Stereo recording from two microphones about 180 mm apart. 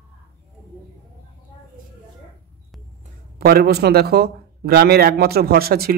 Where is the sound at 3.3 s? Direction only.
55° right (ahead or behind).